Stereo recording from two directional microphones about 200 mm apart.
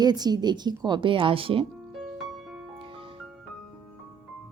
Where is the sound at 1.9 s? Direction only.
Centre (ahead or behind).